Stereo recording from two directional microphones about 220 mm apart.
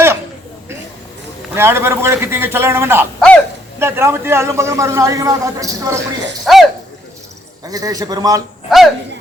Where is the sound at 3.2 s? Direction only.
5° left (ahead or behind).